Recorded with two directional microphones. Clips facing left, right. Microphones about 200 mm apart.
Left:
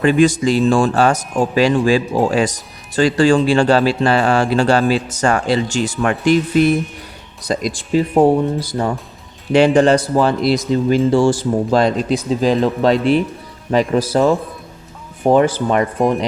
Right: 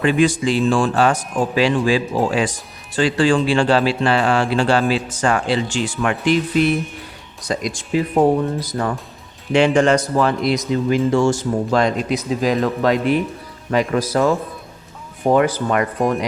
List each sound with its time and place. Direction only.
0.0 s speech: 45° left (ahead or behind)
15.3 s speech: 30° left (ahead or behind)